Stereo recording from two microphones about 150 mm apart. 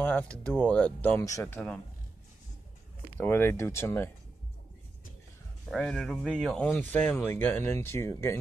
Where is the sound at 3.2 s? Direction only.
15° left (ahead or behind).